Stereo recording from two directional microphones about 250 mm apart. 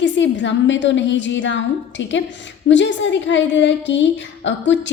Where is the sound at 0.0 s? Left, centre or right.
Left.